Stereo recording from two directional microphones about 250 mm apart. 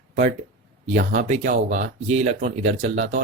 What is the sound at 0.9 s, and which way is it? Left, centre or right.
Speech, right.